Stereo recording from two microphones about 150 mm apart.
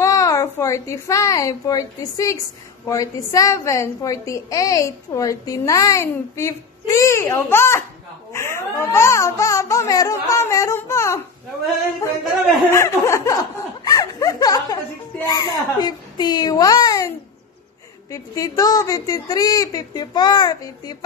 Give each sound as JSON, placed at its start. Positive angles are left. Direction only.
{"t": 0.0, "sound": "a woman's voice", "side_deg": 20}
{"t": 12.7, "sound": "a woman's voice", "side_deg": 20}
{"t": 18.1, "sound": "a woman's voice", "side_deg": 25}